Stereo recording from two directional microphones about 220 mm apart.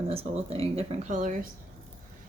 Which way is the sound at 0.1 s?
25° right (ahead or behind).